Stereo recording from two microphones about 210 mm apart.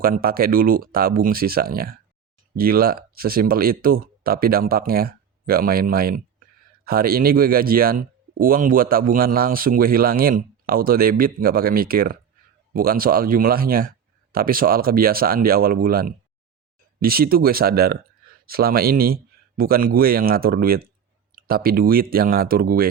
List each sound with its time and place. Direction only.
0.0 s speech: 45° right (ahead or behind)